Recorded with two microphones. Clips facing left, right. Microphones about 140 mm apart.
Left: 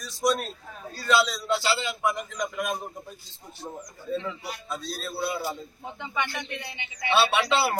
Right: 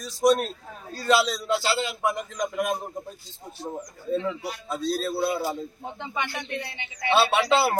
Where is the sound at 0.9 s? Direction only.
40° right (ahead or behind).